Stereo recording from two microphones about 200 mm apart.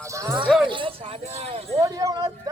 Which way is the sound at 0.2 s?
15° right (ahead or behind).